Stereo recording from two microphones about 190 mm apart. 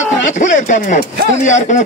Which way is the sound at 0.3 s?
40° left (ahead or behind).